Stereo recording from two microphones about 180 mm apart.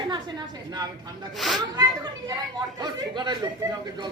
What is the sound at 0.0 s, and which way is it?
A woman's voice, 25° right (ahead or behind).